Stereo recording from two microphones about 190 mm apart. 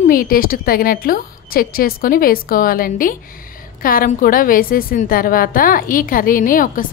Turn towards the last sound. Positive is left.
turn(degrees=45)  # may be behind; listen again after turning